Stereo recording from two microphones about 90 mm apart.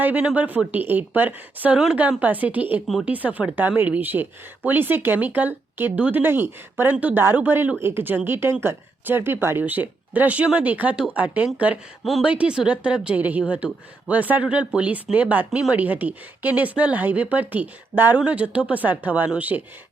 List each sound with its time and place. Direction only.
0.0 s speech: 15° right (ahead or behind)
2.8 s speech: centre (ahead or behind)
3.1 s speech: 20° right (ahead or behind)